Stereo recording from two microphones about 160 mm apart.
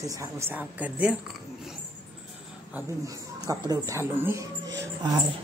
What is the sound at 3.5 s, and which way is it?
Speech, 20° right (ahead or behind).